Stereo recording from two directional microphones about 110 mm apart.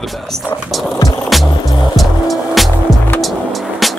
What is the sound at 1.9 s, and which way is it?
Music, centre (ahead or behind).